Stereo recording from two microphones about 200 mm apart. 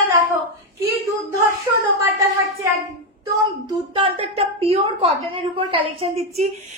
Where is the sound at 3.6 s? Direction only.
25° right (ahead or behind).